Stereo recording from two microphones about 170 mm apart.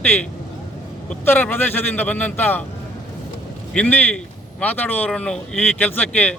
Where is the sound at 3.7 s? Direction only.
10° left (ahead or behind).